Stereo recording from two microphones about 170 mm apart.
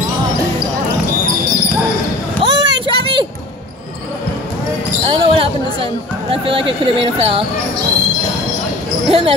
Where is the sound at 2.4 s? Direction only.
25° right (ahead or behind).